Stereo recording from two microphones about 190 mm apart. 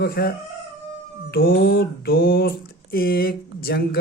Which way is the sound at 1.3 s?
50° left (ahead or behind).